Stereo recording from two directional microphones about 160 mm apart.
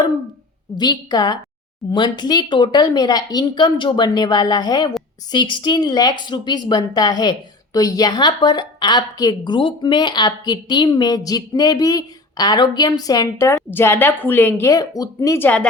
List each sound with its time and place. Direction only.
0.8 s speech: 25° left (ahead or behind)